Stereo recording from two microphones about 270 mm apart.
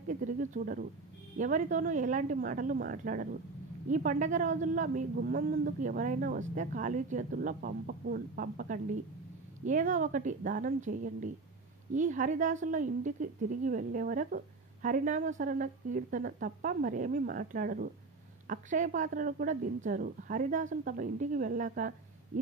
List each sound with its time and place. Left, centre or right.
0.1 s a woman's voice: right